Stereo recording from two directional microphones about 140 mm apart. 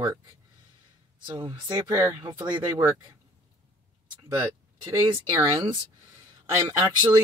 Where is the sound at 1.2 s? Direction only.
30° right (ahead or behind).